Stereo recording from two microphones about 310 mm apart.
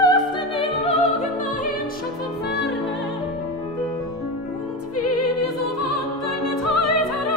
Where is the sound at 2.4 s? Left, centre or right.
Left.